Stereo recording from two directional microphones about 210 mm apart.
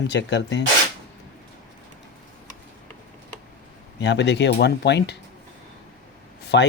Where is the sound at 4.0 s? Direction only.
55° left (ahead or behind).